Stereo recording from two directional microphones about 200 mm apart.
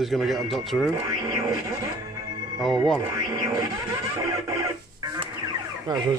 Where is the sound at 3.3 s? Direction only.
15° right (ahead or behind).